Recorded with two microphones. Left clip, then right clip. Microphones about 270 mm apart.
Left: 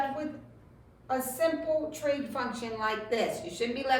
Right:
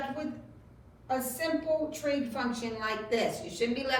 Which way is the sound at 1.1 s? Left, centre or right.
Centre.